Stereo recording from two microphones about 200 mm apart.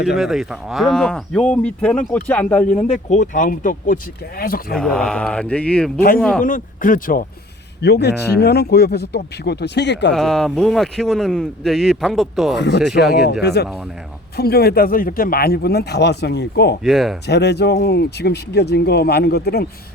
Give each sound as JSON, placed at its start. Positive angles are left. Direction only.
{"t": 0.2, "sound": "speech", "side_deg": 0}
{"t": 2.7, "sound": "speech", "side_deg": 35}
{"t": 4.7, "sound": "speech", "side_deg": 5}
{"t": 6.4, "sound": "speech", "side_deg": 40}
{"t": 7.8, "sound": "speech", "side_deg": 55}
{"t": 10.1, "sound": "speech", "side_deg": 0}
{"t": 12.5, "sound": "speech", "side_deg": 60}
{"t": 13.0, "sound": "speech", "side_deg": 0}
{"t": 13.4, "sound": "speech", "side_deg": 55}
{"t": 16.8, "sound": "speech", "side_deg": 0}
{"t": 17.2, "sound": "speech", "side_deg": 55}